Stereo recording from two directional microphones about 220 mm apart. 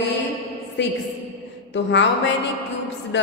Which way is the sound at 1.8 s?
55° left (ahead or behind).